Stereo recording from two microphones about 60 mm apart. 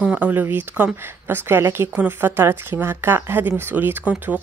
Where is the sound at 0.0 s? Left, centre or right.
Right.